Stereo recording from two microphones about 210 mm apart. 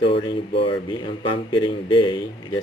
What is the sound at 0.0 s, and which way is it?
Speech, 25° left (ahead or behind).